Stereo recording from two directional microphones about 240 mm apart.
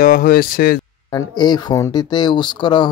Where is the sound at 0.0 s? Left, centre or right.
Left.